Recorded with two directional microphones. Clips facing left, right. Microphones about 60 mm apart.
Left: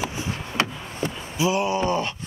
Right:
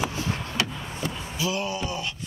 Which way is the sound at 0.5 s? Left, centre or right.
Left.